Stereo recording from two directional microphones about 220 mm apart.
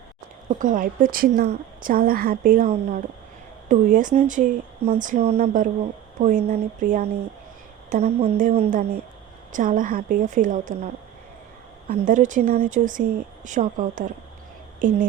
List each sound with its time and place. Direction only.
0.6 s a woman's voice: 40° right (ahead or behind)